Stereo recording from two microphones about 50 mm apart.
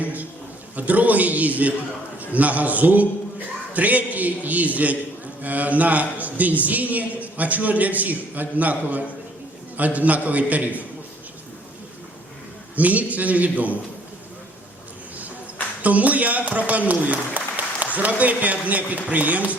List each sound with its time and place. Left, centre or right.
0.0 s a sound: right
0.8 s a man's voice: right
12.7 s a man's voice: right
15.8 s a man's voice: right